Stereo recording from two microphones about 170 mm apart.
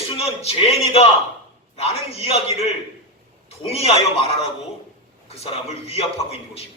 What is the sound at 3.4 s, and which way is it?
A man's voice, 35° left (ahead or behind).